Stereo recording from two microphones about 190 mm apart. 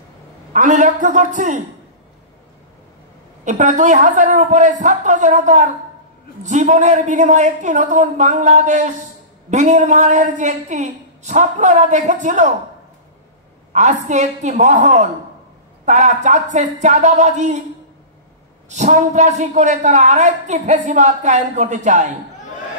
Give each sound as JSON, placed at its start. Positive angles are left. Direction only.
{"t": 0.5, "sound": "a man's voice", "side_deg": -40}
{"t": 3.4, "sound": "a man's voice", "side_deg": -40}
{"t": 13.7, "sound": "a man's voice", "side_deg": -40}
{"t": 18.7, "sound": "a man's voice", "side_deg": -40}